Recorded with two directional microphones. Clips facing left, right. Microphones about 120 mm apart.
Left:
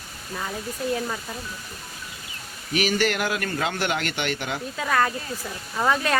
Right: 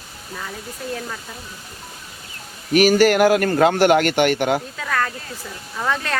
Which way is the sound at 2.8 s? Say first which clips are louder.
Right 10 dB; 40° right (ahead or behind).